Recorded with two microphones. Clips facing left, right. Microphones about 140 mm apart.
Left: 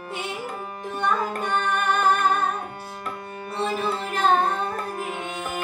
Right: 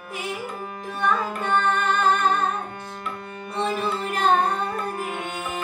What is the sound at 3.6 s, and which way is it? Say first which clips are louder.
Music: right 1 dB; centre (ahead or behind).